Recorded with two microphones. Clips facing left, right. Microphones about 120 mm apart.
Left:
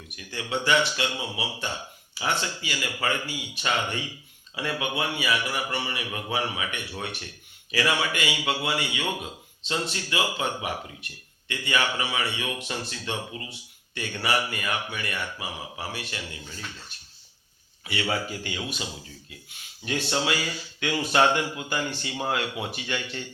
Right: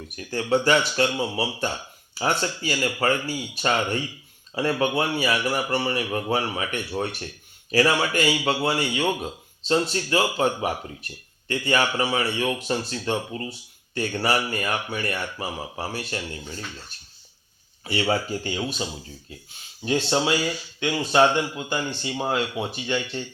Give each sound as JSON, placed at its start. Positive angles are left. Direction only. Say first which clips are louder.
{"t": 0.2, "sound": "a man's voice", "louder": "right 8 dB", "side_deg": -40}
{"t": 17.8, "sound": "a man's voice", "louder": "right 5 dB", "side_deg": -35}